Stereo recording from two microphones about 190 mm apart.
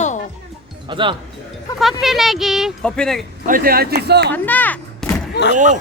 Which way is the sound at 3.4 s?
50° right (ahead or behind).